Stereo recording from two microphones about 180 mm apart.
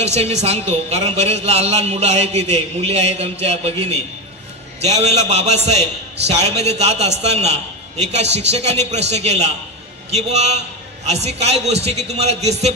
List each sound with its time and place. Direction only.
0.0 s a man's voice: 35° right (ahead or behind)